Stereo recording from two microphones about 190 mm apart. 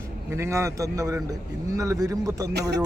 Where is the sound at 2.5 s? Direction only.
60° right (ahead or behind).